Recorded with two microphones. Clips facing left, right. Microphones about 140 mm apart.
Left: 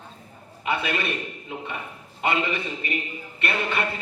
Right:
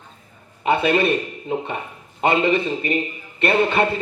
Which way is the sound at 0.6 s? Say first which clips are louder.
Right 9 dB; 30° right (ahead or behind).